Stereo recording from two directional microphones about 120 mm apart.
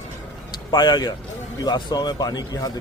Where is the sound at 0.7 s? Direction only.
35° left (ahead or behind).